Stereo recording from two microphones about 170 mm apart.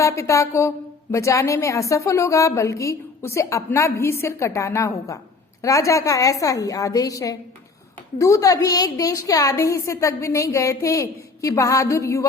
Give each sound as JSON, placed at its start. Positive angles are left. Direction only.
{"t": 0.0, "sound": "a woman's voice", "side_deg": 20}